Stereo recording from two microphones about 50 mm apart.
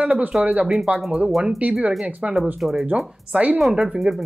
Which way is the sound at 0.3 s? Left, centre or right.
Right.